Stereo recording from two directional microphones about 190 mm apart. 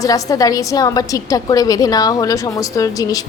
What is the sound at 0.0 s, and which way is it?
A woman's voice, 20° left (ahead or behind).